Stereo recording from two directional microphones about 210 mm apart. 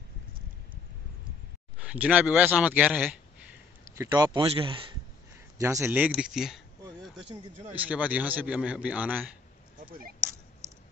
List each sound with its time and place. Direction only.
1.8 s a man's voice: 5° right (ahead or behind); by 4.8 s 25° right (ahead or behind)
5.6 s a man's voice: 15° right (ahead or behind)
7.7 s a man's voice: 5° right (ahead or behind)